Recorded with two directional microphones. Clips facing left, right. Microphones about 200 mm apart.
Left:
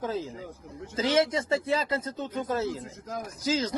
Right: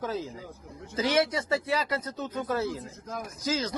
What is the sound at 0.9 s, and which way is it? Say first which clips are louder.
Speech: left 1 dB; 25° left (ahead or behind).